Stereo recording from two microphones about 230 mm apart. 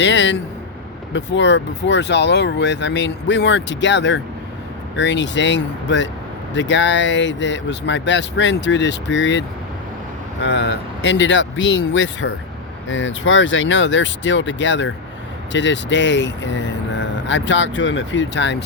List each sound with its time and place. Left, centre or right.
0.0 s speech: left
10.4 s speech: left